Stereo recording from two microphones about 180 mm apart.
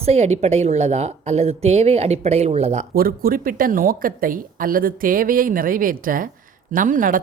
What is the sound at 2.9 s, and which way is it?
Speech, 55° right (ahead or behind).